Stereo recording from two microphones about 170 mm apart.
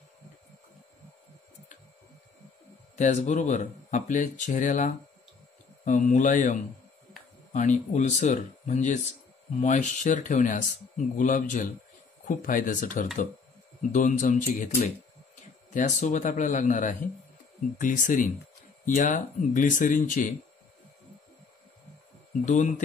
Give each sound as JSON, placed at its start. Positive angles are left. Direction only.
{"t": 3.0, "sound": "speech", "side_deg": 45}
{"t": 15.7, "sound": "speech", "side_deg": 45}
{"t": 22.4, "sound": "speech", "side_deg": 45}